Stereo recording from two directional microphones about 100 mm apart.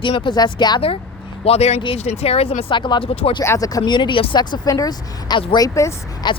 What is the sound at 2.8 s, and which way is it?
Speech, 55° left (ahead or behind).